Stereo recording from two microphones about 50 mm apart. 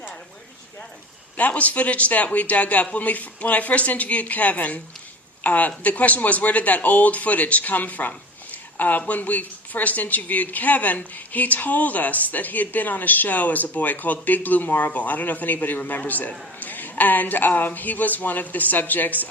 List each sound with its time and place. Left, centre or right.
1.4 s a woman's voice: left